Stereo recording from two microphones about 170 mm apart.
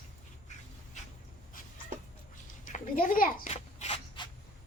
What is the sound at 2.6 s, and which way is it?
Speech, 55° left (ahead or behind).